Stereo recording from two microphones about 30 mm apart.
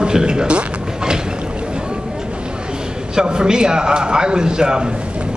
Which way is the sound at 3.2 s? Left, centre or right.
Right.